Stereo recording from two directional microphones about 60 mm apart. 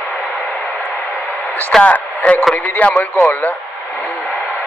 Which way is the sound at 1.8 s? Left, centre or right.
Left.